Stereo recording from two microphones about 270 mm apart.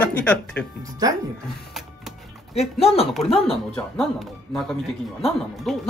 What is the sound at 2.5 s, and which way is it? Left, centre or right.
Speech, left.